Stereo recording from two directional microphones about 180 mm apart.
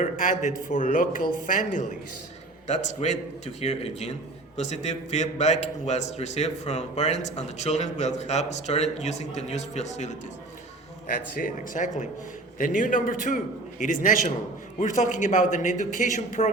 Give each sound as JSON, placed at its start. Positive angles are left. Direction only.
{"t": 0.0, "sound": "a man's voice", "side_deg": 45}